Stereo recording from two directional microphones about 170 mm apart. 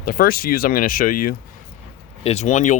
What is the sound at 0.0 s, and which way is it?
Speech, 55° left (ahead or behind).